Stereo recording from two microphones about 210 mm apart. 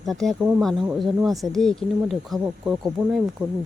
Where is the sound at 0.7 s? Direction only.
15° right (ahead or behind).